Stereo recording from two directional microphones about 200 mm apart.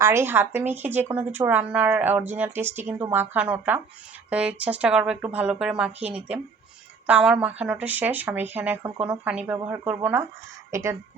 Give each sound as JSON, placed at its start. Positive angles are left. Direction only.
{"t": 0.0, "sound": "speech", "side_deg": -15}